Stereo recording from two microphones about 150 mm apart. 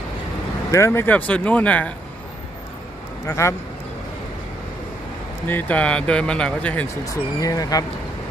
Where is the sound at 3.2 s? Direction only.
20° left (ahead or behind).